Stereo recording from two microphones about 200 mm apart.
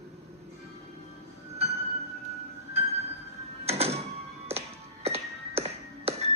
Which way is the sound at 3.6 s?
30° right (ahead or behind).